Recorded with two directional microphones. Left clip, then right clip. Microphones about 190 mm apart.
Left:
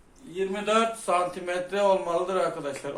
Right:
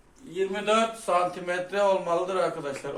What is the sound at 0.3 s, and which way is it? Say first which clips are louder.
A man's voice: even; 10° left (ahead or behind).